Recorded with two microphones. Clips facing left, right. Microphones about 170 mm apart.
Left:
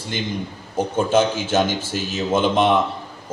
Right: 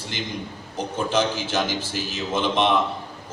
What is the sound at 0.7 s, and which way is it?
Speech, 50° left (ahead or behind).